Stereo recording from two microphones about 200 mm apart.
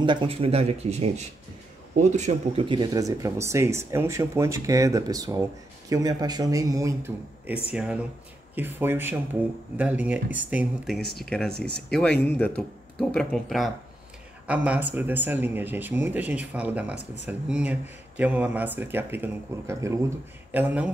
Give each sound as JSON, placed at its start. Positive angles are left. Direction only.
{"t": 0.0, "sound": "speech", "side_deg": -25}
{"t": 17.0, "sound": "speech", "side_deg": -65}
{"t": 17.3, "sound": "speech", "side_deg": -5}
{"t": 20.5, "sound": "speech", "side_deg": -5}